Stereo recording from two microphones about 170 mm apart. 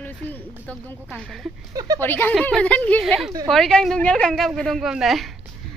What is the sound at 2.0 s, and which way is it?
Speech, 15° left (ahead or behind).